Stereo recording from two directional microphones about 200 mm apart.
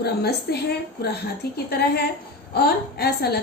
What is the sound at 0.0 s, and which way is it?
A woman's voice, 55° left (ahead or behind).